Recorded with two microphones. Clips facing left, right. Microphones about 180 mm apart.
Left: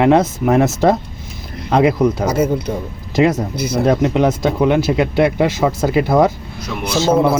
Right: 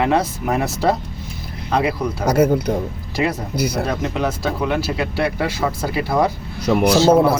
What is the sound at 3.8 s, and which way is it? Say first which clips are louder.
Speech: left 8 dB; 20° left (ahead or behind).